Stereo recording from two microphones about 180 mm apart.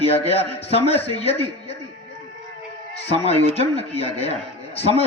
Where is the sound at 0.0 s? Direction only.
35° left (ahead or behind).